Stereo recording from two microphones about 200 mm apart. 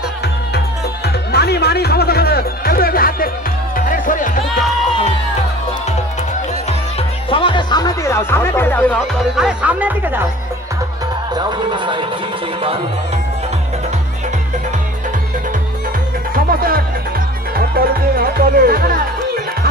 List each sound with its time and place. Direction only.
1.0 s music: 55° left (ahead or behind); by 5.1 s 30° left (ahead or behind)
7.2 s music: 25° left (ahead or behind); by 9.1 s 10° left (ahead or behind)
9.2 s speech: 5° right (ahead or behind)
11.3 s speech: 20° right (ahead or behind)
16.3 s music: 45° right (ahead or behind)
17.6 s speech: 50° right (ahead or behind)